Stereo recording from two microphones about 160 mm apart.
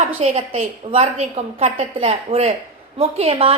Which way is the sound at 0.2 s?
40° right (ahead or behind).